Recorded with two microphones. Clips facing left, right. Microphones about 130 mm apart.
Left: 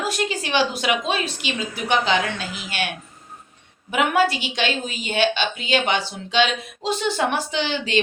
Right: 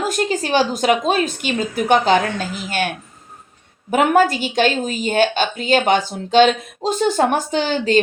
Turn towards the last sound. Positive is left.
turn(degrees=-45)  # may be behind; listen again after turning